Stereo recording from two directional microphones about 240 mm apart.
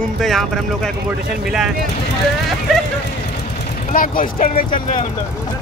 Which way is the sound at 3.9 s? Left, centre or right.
Left.